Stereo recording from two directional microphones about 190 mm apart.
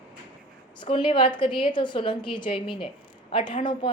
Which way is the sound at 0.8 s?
25° left (ahead or behind).